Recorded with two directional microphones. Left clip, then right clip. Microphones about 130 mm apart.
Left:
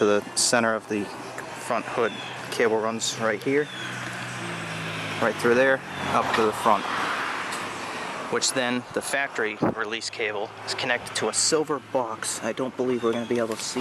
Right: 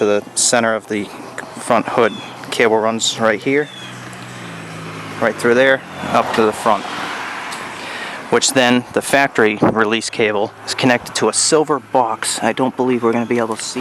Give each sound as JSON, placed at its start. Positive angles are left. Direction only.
{"t": 0.0, "sound": "speech", "side_deg": -5}
{"t": 1.6, "sound": "speech", "side_deg": -25}
{"t": 2.9, "sound": "speech", "side_deg": -15}
{"t": 5.2, "sound": "speech", "side_deg": -10}
{"t": 8.3, "sound": "speech", "side_deg": -15}
{"t": 11.3, "sound": "speech", "side_deg": -15}
{"t": 11.7, "sound": "speech", "side_deg": -25}
{"t": 13.1, "sound": "speech", "side_deg": -35}